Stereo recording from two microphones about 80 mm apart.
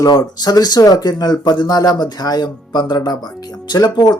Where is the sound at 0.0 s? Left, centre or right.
Left.